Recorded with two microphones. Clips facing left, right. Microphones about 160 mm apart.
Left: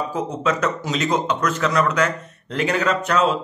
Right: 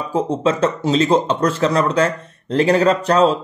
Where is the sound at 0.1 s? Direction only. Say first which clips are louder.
Right 5 dB; 30° right (ahead or behind).